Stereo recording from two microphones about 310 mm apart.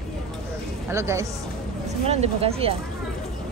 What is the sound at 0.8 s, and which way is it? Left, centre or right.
Speech, centre.